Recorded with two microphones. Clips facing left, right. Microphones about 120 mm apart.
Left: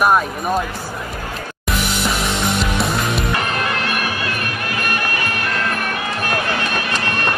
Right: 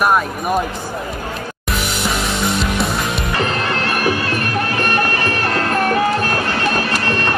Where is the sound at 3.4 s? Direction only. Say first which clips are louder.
Right 2 dB; 35° right (ahead or behind).